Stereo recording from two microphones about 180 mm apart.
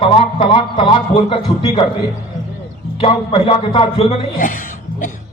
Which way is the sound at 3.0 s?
30° left (ahead or behind).